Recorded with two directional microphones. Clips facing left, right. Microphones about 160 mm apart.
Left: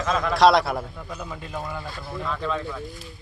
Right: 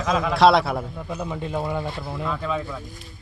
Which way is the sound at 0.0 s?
5° right (ahead or behind).